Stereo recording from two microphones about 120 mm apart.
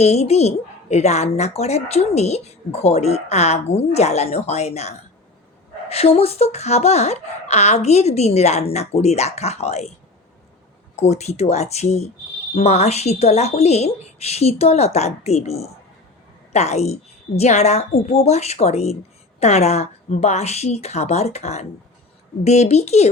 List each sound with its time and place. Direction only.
0.0 s speech: 65° left (ahead or behind)
10.9 s a child's voice: 65° left (ahead or behind)